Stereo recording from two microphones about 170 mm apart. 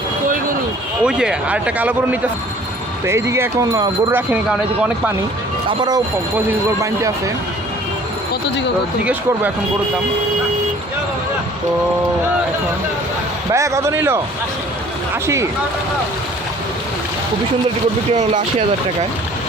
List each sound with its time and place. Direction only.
1.0 s speech: 5° right (ahead or behind)
3.1 s speech: 15° right (ahead or behind)
5.6 s speech: 25° right (ahead or behind)
13.5 s speech: 15° right (ahead or behind)